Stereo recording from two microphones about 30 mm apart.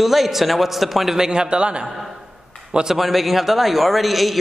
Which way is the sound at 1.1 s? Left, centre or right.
Right.